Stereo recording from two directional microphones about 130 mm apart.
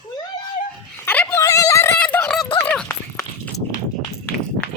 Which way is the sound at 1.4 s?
25° left (ahead or behind).